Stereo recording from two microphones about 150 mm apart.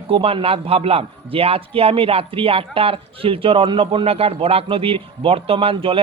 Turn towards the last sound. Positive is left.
turn(degrees=-40)  # may be behind; listen again after turning